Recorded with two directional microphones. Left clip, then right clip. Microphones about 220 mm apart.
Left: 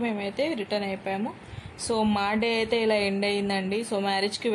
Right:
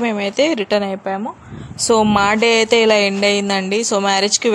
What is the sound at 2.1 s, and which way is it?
Speech, 25° right (ahead or behind).